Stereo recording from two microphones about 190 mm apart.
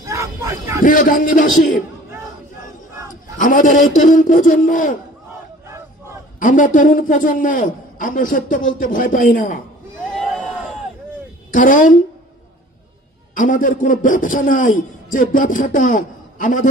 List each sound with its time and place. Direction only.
0.0 s a sound: 15° right (ahead or behind)
0.8 s a man's voice: 45° left (ahead or behind)
3.3 s a man's voice: 45° left (ahead or behind)
6.4 s a man's voice: 45° left (ahead or behind)
10.0 s a sound: centre (ahead or behind)
11.5 s a man's voice: 45° left (ahead or behind)
13.3 s a man's voice: 45° left (ahead or behind)